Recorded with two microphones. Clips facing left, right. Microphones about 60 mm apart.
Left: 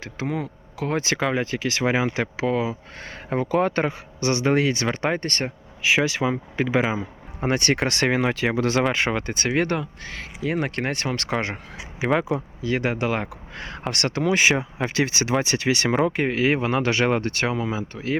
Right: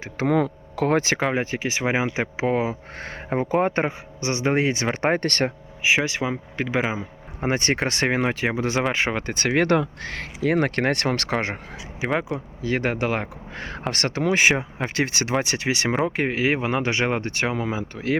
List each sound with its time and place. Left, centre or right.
0.3 s speech: right
0.8 s speech: right
1.0 s speech: right
4.2 s speech: centre
4.5 s speech: right
4.9 s speech: right
6.0 s speech: centre
7.4 s speech: right
11.3 s speech: right
12.6 s speech: right
16.0 s speech: right